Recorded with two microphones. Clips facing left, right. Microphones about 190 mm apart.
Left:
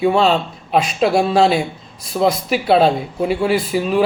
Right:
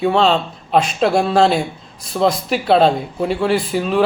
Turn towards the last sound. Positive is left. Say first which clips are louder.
# even
turn(degrees=5)  # may be behind; listen again after turning